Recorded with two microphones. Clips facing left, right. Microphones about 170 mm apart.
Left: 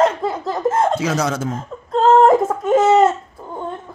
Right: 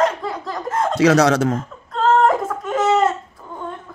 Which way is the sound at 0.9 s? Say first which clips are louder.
Right 6 dB; 70° right (ahead or behind).